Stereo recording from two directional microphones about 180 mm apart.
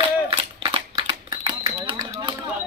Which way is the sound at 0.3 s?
35° right (ahead or behind).